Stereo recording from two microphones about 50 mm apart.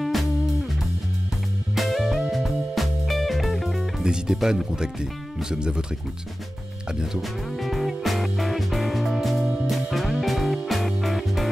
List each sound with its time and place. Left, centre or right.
0.0 s music: centre
1.8 s music: centre
4.0 s speech: centre
7.2 s music: centre